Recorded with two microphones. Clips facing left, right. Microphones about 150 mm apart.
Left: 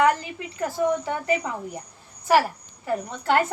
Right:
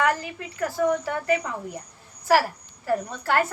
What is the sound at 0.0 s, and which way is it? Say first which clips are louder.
A woman's voice: left 3 dB; 20° left (ahead or behind).